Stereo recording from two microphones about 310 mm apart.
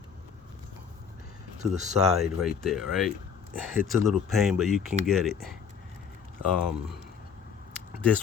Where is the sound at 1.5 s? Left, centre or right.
Right.